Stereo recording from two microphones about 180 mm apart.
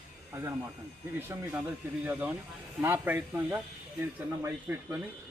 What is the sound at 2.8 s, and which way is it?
A man's voice, 10° right (ahead or behind).